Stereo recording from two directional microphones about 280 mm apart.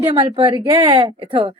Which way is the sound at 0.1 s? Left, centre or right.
Centre.